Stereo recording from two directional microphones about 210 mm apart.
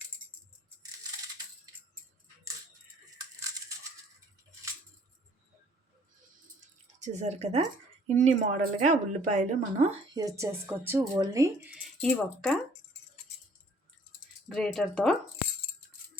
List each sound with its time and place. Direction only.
7.0 s a woman's voice: 35° right (ahead or behind)
10.2 s speech: 15° right (ahead or behind)
11.7 s rattle: centre (ahead or behind)
14.5 s speech: centre (ahead or behind)